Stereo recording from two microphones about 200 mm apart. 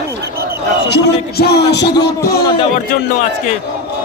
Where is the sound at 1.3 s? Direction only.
55° left (ahead or behind).